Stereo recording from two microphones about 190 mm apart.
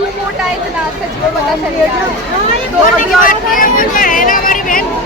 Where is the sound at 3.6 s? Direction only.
45° left (ahead or behind).